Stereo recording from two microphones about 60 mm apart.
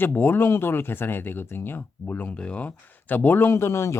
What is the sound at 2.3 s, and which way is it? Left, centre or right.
Speech, left.